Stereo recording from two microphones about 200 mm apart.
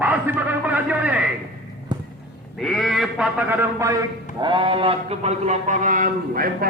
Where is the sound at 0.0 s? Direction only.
10° right (ahead or behind).